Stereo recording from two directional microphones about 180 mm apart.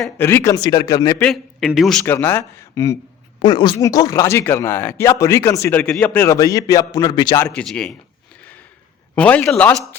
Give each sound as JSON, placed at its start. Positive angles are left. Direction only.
{"t": 0.2, "sound": "speech", "side_deg": 15}
{"t": 1.2, "sound": "a man's voice", "side_deg": 0}
{"t": 2.1, "sound": "speech", "side_deg": 15}
{"t": 7.6, "sound": "a man's voice", "side_deg": 5}
{"t": 8.4, "sound": "a sound", "side_deg": 10}
{"t": 9.1, "sound": "speech", "side_deg": 10}